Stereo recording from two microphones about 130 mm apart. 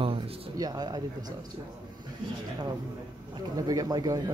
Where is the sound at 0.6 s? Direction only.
30° right (ahead or behind).